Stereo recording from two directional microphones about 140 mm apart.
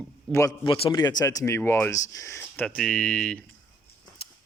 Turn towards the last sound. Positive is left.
turn(degrees=5)  # may be behind; listen again after turning